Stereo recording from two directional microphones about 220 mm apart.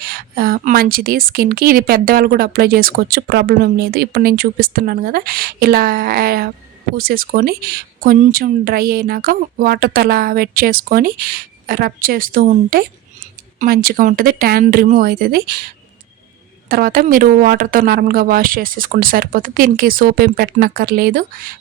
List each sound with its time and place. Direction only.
0.0 s a woman's voice: 40° right (ahead or behind)
16.6 s speech: 40° right (ahead or behind)